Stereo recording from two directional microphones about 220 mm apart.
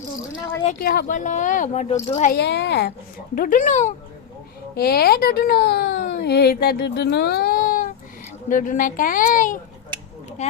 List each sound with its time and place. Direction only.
0.6 s a woman's voice: 40° left (ahead or behind)
2.3 s a woman's voice: 50° left (ahead or behind)
3.3 s a woman's voice: 40° left (ahead or behind)
4.7 s a woman's voice: 45° left (ahead or behind)